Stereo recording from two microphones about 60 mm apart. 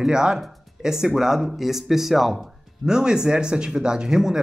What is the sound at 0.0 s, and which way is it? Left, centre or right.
Speech, centre.